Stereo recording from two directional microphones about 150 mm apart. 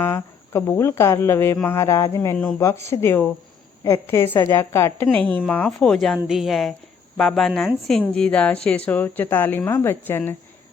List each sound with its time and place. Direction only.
0.0 s a woman's voice: 15° left (ahead or behind)